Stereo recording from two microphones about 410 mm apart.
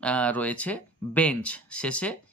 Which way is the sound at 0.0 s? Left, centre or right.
Centre.